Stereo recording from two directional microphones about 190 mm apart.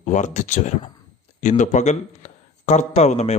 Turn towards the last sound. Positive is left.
turn(degrees=35)  # may be behind; listen again after turning